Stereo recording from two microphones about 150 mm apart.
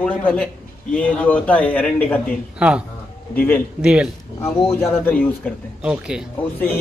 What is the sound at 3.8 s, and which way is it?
Speech, 5° right (ahead or behind).